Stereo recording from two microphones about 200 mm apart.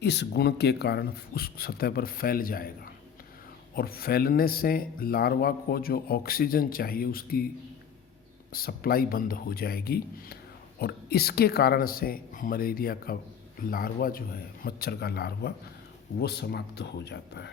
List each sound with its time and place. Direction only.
0.0 s speech: 55° left (ahead or behind)
8.5 s speech: 50° left (ahead or behind)